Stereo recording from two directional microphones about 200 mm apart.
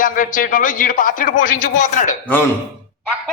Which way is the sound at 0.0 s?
45° left (ahead or behind).